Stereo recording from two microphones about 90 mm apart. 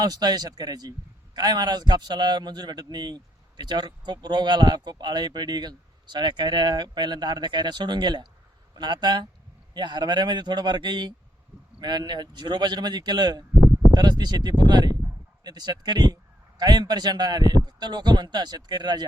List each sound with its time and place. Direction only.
0.0 s a man's voice: 50° right (ahead or behind)